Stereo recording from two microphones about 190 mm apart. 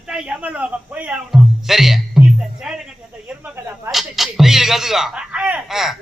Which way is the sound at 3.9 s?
Centre (ahead or behind).